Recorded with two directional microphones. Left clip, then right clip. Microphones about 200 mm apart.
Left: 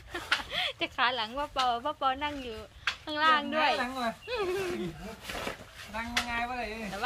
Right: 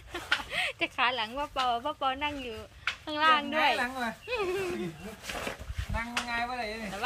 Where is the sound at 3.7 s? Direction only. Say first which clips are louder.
Even; 20° right (ahead or behind).